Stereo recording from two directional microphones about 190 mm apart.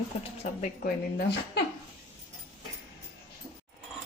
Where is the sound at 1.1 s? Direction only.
60° left (ahead or behind).